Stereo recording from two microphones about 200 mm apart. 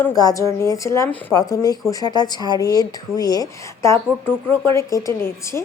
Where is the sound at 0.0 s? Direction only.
20° left (ahead or behind).